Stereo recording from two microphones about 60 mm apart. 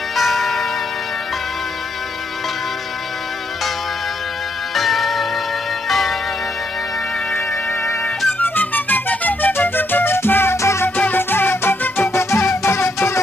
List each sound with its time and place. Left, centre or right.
0.2 s church bell: centre
4.7 s music: centre
5.9 s church bell: centre
8.4 s music: left
10.8 s music: left
12.0 s music: left